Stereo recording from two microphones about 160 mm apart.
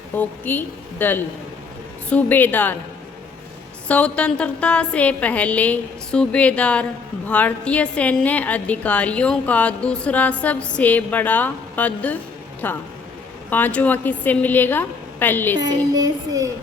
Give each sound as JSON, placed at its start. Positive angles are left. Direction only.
{"t": 0.2, "sound": "a woman's voice", "side_deg": 10}
{"t": 3.8, "sound": "a woman's voice", "side_deg": 10}
{"t": 15.6, "sound": "speech", "side_deg": -25}